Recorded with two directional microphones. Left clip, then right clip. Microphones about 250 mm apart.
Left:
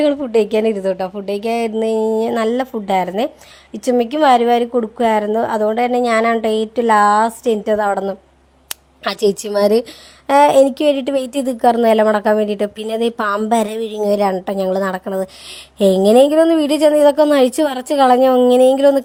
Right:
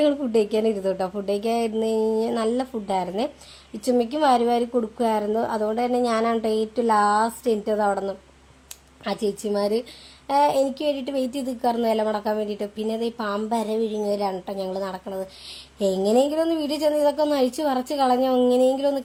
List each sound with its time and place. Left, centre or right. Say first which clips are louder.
0.0 s a woman's voice: left 6 dB; centre
8.7 s a woman's voice: left 7 dB; left